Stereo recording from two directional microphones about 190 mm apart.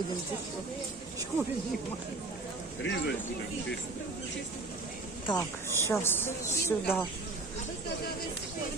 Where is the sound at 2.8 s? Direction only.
65° left (ahead or behind).